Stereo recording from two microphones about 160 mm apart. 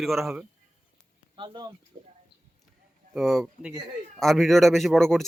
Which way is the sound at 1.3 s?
30° right (ahead or behind).